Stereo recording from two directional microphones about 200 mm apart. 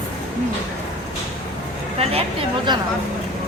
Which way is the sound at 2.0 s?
30° right (ahead or behind).